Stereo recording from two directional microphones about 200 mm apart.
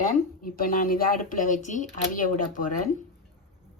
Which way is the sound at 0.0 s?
45° left (ahead or behind).